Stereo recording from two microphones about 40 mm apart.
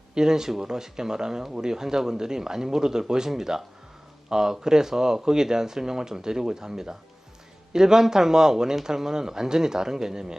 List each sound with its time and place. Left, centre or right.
0.1 s speech: centre